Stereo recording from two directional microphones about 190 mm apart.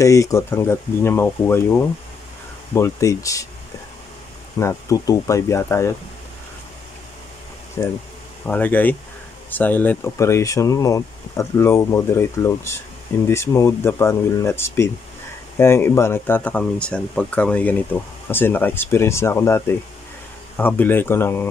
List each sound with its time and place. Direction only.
0.0 s speech: 15° left (ahead or behind)
4.6 s speech: 15° left (ahead or behind)
7.8 s speech: 15° left (ahead or behind)